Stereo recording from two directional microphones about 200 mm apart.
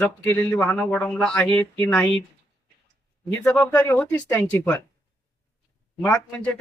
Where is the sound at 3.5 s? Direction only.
10° left (ahead or behind).